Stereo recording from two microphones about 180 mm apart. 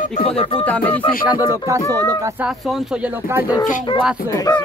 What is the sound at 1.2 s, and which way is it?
Speech, 15° right (ahead or behind).